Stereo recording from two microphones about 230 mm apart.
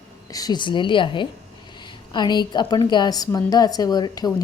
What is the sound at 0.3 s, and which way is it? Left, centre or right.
A woman's voice, centre.